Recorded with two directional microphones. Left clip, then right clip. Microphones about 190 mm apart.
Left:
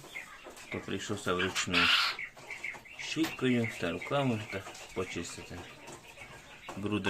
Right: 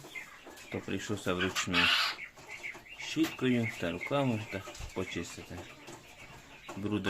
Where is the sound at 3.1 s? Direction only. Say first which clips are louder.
Even; 15° right (ahead or behind).